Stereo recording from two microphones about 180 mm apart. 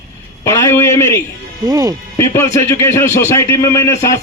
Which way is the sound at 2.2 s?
15° left (ahead or behind).